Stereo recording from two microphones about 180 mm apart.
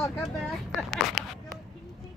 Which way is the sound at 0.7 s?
Centre (ahead or behind).